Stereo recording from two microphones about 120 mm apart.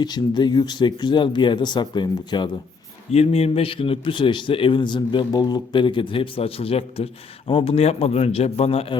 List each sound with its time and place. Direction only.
0.0 s speech: 35° left (ahead or behind)
3.1 s a man's voice: 60° left (ahead or behind)